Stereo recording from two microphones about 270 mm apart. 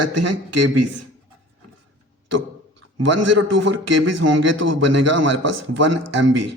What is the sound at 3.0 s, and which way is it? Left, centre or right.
A man's voice, right.